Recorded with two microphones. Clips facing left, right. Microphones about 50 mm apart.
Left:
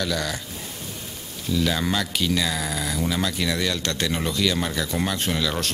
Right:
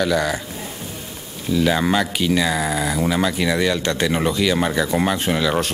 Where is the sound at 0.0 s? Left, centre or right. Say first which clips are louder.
Right 7 dB; centre.